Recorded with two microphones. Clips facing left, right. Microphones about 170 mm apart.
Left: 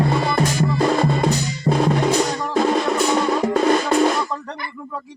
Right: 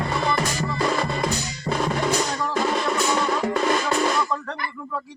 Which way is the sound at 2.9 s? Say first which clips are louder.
Left 4 dB; 35° left (ahead or behind).